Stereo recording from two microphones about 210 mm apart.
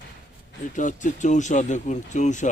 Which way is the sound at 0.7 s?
35° left (ahead or behind).